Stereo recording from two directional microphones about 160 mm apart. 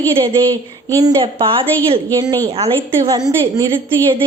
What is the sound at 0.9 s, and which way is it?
Speech, 20° right (ahead or behind).